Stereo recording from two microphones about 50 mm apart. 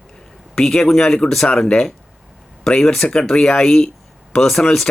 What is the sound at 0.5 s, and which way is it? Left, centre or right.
Speech, centre.